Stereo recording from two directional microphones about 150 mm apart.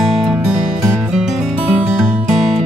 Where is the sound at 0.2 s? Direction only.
5° right (ahead or behind).